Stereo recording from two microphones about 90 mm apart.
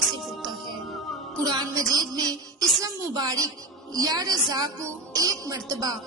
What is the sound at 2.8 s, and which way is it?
Speech, 40° right (ahead or behind).